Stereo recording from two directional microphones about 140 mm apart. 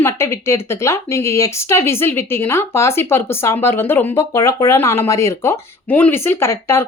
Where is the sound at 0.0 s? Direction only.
20° left (ahead or behind).